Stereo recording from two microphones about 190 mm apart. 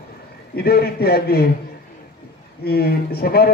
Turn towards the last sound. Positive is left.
turn(degrees=55)  # may be behind; listen again after turning